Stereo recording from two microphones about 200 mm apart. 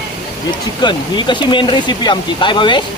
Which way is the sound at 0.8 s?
25° left (ahead or behind).